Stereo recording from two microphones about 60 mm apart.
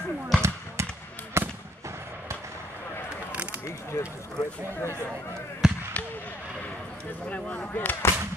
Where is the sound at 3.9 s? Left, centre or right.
Left.